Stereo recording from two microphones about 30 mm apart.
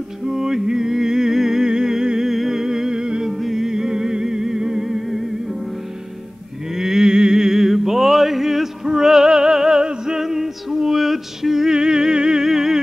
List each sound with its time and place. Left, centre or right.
0.2 s music: centre
6.7 s music: centre
10.2 s music: centre
11.7 s music: right
12.4 s music: centre